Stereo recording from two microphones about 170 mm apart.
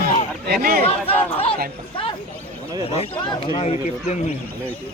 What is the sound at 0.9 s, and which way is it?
Speech, 35° left (ahead or behind).